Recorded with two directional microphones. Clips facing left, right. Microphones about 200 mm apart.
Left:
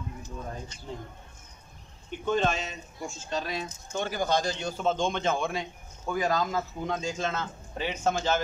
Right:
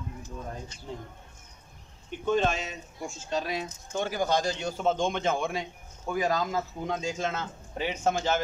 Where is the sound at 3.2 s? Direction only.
10° right (ahead or behind).